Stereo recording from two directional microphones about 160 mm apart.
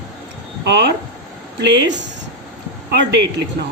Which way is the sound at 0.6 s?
90° right.